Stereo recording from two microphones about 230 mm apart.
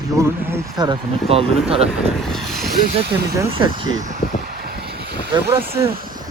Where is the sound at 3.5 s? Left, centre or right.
Right.